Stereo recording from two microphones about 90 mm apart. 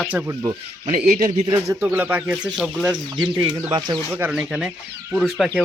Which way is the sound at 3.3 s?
55° right (ahead or behind).